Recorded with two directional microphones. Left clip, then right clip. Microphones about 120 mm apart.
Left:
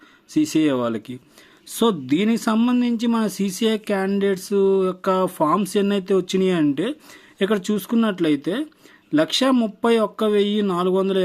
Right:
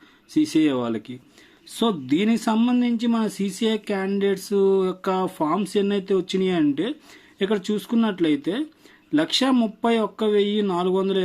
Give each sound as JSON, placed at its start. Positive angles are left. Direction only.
{"t": 0.3, "sound": "speech", "side_deg": 25}